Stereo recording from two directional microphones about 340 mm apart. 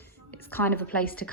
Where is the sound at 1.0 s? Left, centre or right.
Left.